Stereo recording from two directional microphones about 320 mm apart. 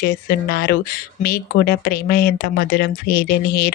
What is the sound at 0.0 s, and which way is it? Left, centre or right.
Speech, left.